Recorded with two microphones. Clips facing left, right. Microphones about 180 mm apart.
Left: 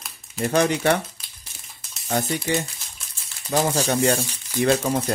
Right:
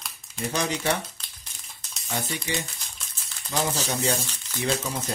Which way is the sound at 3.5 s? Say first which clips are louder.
Left 6 dB; 60° left (ahead or behind).